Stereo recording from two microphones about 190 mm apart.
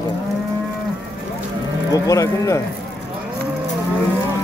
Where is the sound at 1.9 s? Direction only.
20° left (ahead or behind).